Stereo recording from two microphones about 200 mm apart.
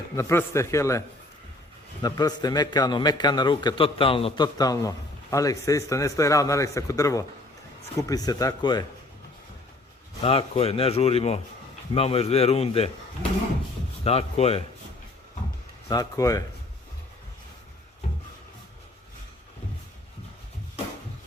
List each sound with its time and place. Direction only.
0.2 s a man's voice: 15° left (ahead or behind)
10.2 s a man's voice: 30° left (ahead or behind)
14.0 s a man's voice: 30° left (ahead or behind)
15.9 s speech: 15° left (ahead or behind)